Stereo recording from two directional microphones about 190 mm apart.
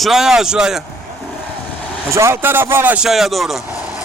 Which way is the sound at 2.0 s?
15° right (ahead or behind).